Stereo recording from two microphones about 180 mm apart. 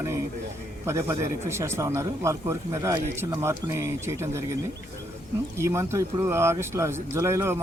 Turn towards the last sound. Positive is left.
turn(degrees=-15)  # may be behind; listen again after turning